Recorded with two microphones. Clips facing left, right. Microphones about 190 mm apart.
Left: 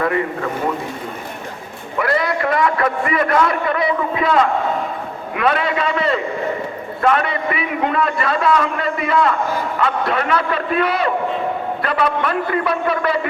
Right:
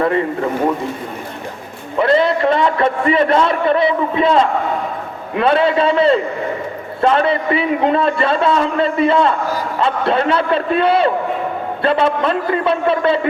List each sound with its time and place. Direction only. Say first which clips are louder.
2.0 s a man's voice: right 5 dB; 25° right (ahead or behind)